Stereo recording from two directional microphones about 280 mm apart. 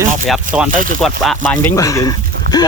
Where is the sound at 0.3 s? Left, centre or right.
Centre.